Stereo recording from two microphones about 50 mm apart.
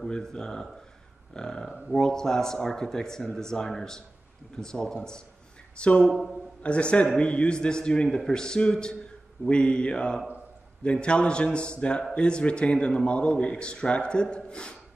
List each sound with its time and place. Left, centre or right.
0.0 s a man's voice: centre
6.0 s speech: centre
6.6 s a man's voice: left